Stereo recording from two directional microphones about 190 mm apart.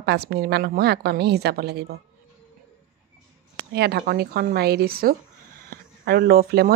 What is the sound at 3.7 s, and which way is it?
Speech, 60° right (ahead or behind).